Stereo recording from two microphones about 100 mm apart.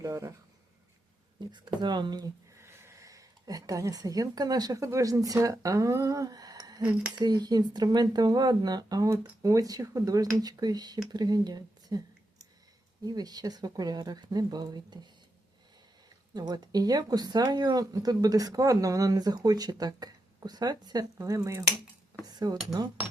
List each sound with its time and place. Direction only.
0.0 s speech: 30° right (ahead or behind)
1.5 s speech: 45° right (ahead or behind)
2.6 s speech: 25° right (ahead or behind)
16.3 s speech: 45° right (ahead or behind)
22.2 s cutlery: 40° right (ahead or behind)